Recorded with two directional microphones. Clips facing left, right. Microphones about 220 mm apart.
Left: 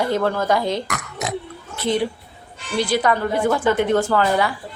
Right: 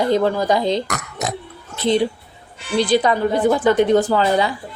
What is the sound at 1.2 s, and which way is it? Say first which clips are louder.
Burping: right 1 dB; 40° right (ahead or behind).